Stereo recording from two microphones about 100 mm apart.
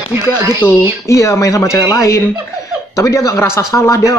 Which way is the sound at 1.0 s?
30° left (ahead or behind).